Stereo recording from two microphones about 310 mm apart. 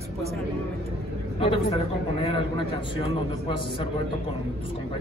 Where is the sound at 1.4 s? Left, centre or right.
Centre.